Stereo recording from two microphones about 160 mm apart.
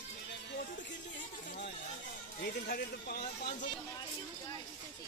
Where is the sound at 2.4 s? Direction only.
75° left (ahead or behind).